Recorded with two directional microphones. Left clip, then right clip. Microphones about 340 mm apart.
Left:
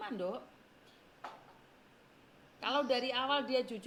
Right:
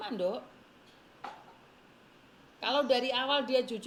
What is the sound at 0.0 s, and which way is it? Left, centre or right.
Speech, centre.